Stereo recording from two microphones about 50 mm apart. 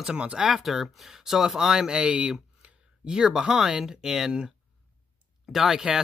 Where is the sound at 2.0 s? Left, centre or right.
Right.